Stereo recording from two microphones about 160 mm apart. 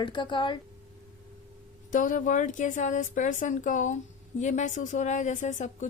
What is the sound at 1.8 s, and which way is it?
A woman's voice, 55° left (ahead or behind).